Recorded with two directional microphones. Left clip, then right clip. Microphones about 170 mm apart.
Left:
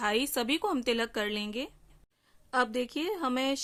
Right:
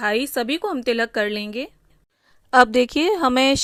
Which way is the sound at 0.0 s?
25° right (ahead or behind).